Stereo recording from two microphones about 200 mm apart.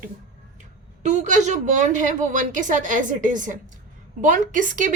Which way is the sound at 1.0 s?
35° right (ahead or behind).